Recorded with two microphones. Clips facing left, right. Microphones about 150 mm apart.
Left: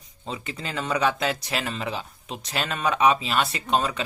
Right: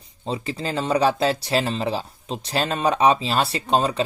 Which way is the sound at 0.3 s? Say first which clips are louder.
Right 6 dB; 30° right (ahead or behind).